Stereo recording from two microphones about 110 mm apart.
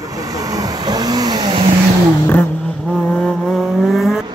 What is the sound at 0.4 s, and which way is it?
Vehicle, 35° right (ahead or behind).